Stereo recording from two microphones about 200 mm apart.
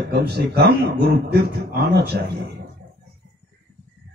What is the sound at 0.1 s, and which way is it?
A man's voice, 55° right (ahead or behind).